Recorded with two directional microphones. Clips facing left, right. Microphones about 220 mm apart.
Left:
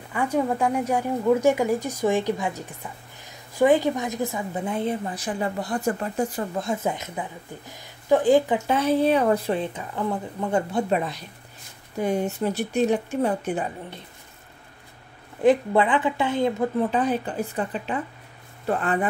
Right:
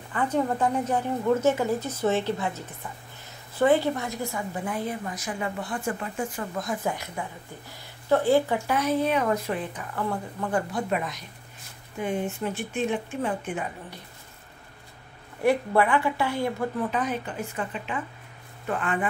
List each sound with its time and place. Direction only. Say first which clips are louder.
0.1 s a woman's voice: left 2 dB; 10° left (ahead or behind)
8.7 s a woman's voice: left 4 dB; 30° left (ahead or behind)
15.4 s a woman's voice: left 3 dB; 20° left (ahead or behind)
16.9 s speech: left 5 dB; 35° left (ahead or behind)